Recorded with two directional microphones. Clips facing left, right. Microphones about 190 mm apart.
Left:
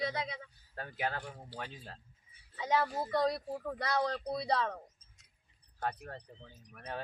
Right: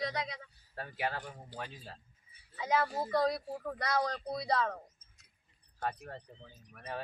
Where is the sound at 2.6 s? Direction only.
Centre (ahead or behind).